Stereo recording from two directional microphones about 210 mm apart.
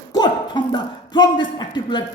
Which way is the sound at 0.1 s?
20° left (ahead or behind).